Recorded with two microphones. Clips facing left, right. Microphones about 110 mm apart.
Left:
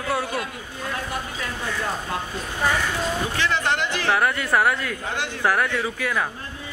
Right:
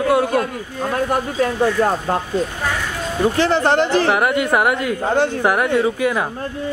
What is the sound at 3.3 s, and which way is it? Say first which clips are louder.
Speech: right 9 dB; 35° right (ahead or behind).